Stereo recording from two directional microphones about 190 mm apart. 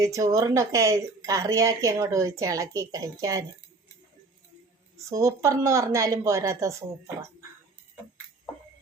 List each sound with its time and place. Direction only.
0.0 s a woman's voice: 15° right (ahead or behind)
5.0 s a woman's voice: 15° right (ahead or behind)